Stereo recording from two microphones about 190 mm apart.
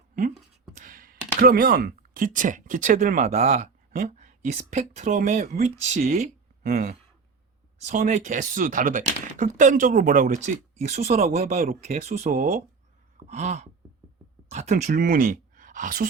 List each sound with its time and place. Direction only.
0.8 s a sound: 45° right (ahead or behind)
1.4 s speech: 50° right (ahead or behind)
7.9 s speech: 40° right (ahead or behind)